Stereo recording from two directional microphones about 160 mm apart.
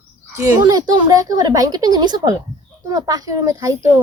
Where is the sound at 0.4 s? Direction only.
20° right (ahead or behind).